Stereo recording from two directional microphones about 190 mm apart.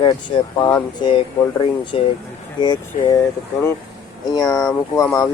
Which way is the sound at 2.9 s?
40° left (ahead or behind).